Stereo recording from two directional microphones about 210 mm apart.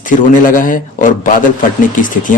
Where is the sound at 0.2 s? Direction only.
40° left (ahead or behind).